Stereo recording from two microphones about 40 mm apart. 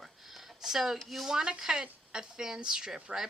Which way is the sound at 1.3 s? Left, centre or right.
Centre.